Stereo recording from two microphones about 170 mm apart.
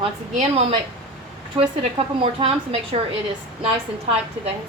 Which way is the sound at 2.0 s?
40° right (ahead or behind).